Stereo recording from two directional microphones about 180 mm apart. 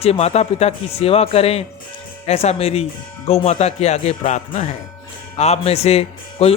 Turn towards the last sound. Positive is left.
turn(degrees=35)  # may be behind; listen again after turning